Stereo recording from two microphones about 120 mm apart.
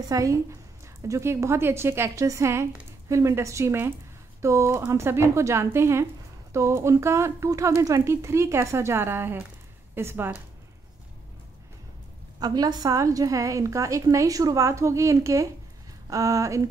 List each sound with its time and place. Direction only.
0.1 s a woman's voice: 25° right (ahead or behind)
12.4 s a woman's voice: 35° right (ahead or behind)